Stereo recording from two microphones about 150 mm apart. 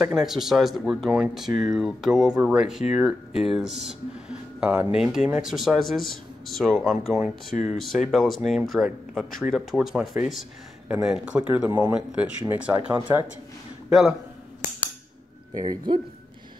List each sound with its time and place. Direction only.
0.1 s a man's voice: 5° right (ahead or behind)
15.6 s a man's voice: 30° right (ahead or behind)